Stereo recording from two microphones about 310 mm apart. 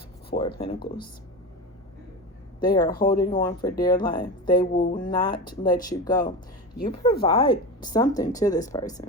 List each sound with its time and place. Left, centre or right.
0.3 s speech: centre
2.6 s speech: centre